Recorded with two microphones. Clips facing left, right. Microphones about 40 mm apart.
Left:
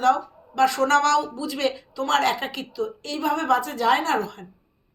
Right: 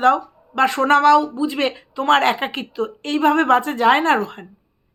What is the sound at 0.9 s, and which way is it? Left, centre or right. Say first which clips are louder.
Speech: right 6 dB; centre.